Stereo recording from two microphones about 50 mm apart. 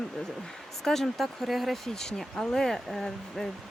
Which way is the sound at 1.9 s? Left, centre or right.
Centre.